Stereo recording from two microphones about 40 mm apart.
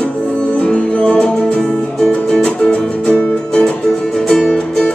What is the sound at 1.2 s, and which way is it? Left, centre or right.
Music, centre.